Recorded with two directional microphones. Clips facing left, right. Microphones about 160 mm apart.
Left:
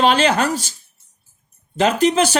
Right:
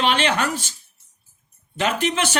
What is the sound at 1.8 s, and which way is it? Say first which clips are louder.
Speech: left 7 dB; 35° left (ahead or behind).